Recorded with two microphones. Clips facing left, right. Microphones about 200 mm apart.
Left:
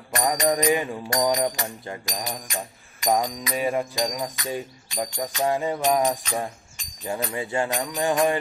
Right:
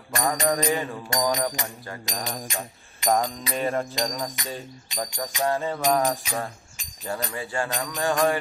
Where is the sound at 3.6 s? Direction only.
10° left (ahead or behind).